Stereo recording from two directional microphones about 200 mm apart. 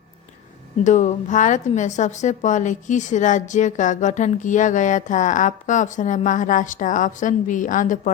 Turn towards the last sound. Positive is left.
turn(degrees=40)  # may be behind; listen again after turning